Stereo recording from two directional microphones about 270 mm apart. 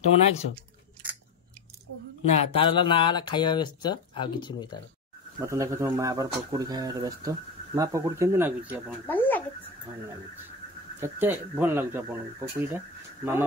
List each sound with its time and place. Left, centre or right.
2.2 s speech: centre
5.4 s speech: centre
9.0 s speech: centre
11.0 s speech: centre